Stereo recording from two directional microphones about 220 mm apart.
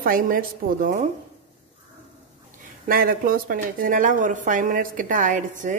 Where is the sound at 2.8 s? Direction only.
40° right (ahead or behind).